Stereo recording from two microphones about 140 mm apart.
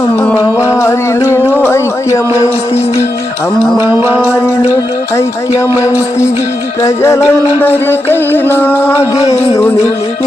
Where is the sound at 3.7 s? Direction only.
15° right (ahead or behind).